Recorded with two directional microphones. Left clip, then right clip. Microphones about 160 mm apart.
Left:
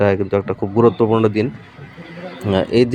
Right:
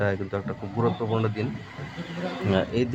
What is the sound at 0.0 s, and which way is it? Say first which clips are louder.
Speech: left 11 dB; 40° left (ahead or behind).